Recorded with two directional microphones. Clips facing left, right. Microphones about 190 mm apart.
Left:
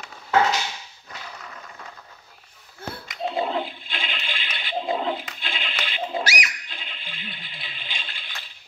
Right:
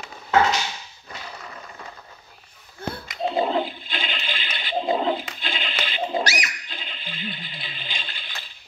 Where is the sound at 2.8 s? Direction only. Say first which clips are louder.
Right 4 dB; 5° left (ahead or behind).